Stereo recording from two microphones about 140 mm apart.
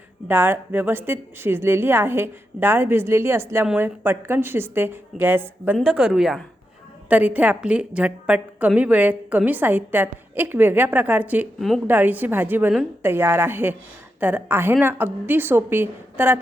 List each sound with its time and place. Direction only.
0.3 s a woman's voice: 15° right (ahead or behind)